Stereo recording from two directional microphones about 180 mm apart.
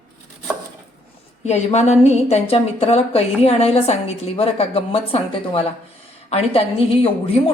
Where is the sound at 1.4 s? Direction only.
40° left (ahead or behind).